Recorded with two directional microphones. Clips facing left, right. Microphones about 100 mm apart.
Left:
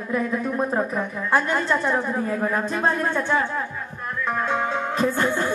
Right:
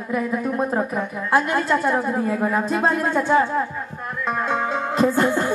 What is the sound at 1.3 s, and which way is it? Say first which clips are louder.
A woman's voice: right 2 dB; 10° right (ahead or behind).